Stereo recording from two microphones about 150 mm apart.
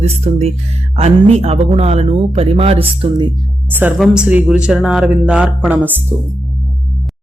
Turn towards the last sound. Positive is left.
turn(degrees=-10)  # may be behind; listen again after turning